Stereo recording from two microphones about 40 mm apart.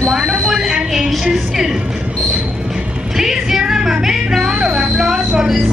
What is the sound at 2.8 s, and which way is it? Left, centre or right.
Music, right.